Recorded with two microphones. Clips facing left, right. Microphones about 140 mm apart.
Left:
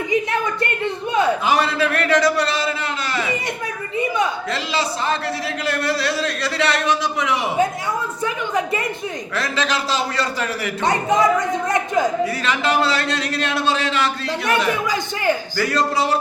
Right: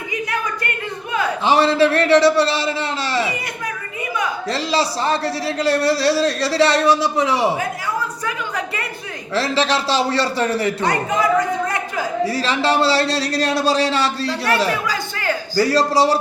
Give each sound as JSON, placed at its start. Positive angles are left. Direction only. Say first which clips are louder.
{"t": 0.1, "sound": "a sound", "louder": "left 3 dB", "side_deg": 25}
{"t": 1.5, "sound": "a man's voice", "louder": "right 4 dB", "side_deg": -30}
{"t": 4.4, "sound": "a man's voice", "louder": "right 3 dB", "side_deg": -35}
{"t": 8.2, "sound": "a woman's voice", "louder": "left 3 dB", "side_deg": 20}
{"t": 9.3, "sound": "a man's voice", "louder": "right 5 dB", "side_deg": -30}
{"t": 10.8, "sound": "speech", "louder": "left 6 dB", "side_deg": 20}
{"t": 12.2, "sound": "a man's voice", "louder": "right 2 dB", "side_deg": -30}
{"t": 14.8, "sound": "speech", "louder": "left 3 dB", "side_deg": 20}
{"t": 15.5, "sound": "a man's voice", "louder": "right 4 dB", "side_deg": -35}